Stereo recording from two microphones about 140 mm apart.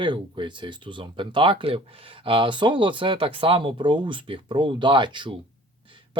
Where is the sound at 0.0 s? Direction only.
35° right (ahead or behind).